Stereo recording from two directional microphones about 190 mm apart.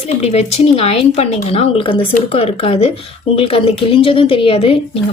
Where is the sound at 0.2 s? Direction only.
35° left (ahead or behind).